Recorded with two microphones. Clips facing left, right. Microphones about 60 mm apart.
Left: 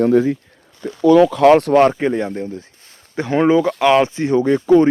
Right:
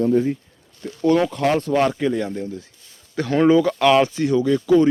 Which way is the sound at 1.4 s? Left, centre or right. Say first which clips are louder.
Left 9 dB; left.